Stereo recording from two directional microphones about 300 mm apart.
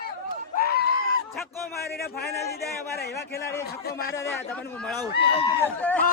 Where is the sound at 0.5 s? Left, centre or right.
Left.